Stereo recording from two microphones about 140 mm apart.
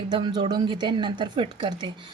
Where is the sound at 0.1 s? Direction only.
30° right (ahead or behind).